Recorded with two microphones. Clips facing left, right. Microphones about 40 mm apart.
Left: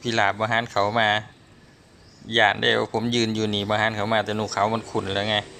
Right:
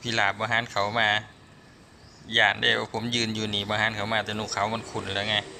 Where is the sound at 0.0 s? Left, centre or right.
Centre.